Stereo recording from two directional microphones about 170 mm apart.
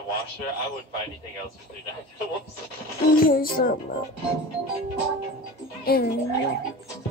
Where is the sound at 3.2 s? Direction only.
55° left (ahead or behind).